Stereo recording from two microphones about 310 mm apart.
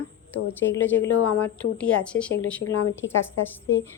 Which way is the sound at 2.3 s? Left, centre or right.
Left.